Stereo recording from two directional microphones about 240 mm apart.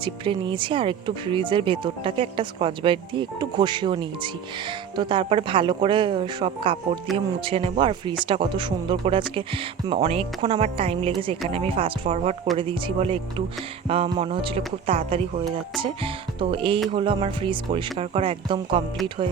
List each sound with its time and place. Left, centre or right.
0.0 s speech: centre